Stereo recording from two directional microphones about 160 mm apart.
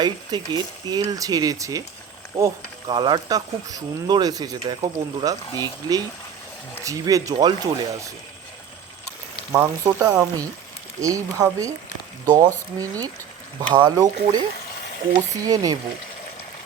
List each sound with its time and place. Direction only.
0.0 s speech: 30° right (ahead or behind)
9.5 s speech: 20° right (ahead or behind)
15.4 s speech: 25° right (ahead or behind)